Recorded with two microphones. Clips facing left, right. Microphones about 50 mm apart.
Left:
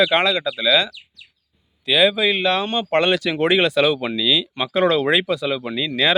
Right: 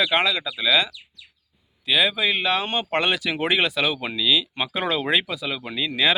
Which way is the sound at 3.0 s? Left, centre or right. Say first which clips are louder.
Left 6 dB; centre.